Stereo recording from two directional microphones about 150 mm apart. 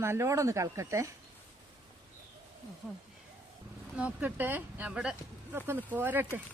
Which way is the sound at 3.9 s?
10° right (ahead or behind).